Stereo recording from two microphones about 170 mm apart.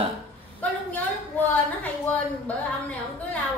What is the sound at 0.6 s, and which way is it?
Speech, 10° left (ahead or behind).